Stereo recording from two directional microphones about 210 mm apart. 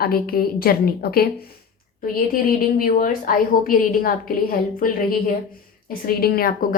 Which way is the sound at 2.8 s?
40° left (ahead or behind).